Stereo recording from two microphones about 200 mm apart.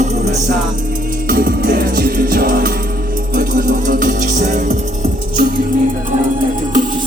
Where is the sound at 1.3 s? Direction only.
45° right (ahead or behind).